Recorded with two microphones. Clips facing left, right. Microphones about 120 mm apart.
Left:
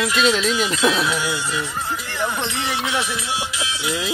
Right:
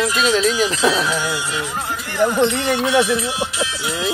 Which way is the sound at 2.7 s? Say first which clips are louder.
Right 8 dB; 40° right (ahead or behind).